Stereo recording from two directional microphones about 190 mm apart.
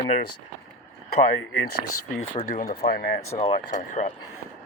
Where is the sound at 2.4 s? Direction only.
45° left (ahead or behind).